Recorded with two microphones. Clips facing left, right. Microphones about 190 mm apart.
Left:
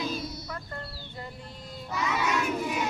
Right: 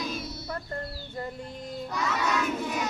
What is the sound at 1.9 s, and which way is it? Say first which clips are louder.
Crowd: left 1 dB; 10° left (ahead or behind).